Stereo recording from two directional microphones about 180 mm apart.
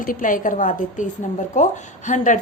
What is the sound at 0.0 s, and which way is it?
A woman's voice, 50° left (ahead or behind).